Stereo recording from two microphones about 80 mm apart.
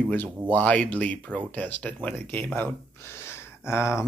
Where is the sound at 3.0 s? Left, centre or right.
Left.